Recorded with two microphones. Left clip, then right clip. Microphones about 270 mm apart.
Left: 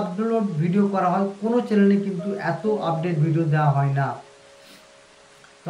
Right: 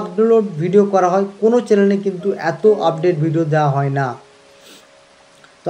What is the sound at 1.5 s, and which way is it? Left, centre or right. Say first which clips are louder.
A man's voice: right 5 dB; centre.